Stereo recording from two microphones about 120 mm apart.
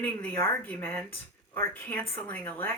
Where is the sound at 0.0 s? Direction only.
15° left (ahead or behind).